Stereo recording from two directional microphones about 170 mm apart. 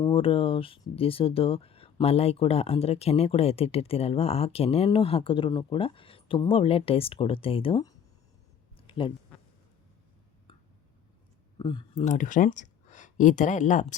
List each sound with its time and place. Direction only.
0.1 s speech: 30° left (ahead or behind)
8.9 s speech: 30° left (ahead or behind)
11.6 s speech: 25° left (ahead or behind)
12.0 s speech: 50° left (ahead or behind)